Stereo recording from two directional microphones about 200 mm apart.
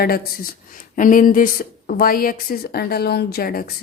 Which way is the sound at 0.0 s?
50° left (ahead or behind).